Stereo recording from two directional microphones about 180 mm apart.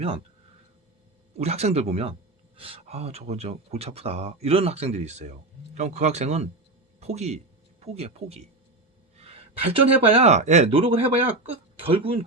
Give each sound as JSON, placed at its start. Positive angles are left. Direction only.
{"t": 1.4, "sound": "speech", "side_deg": -35}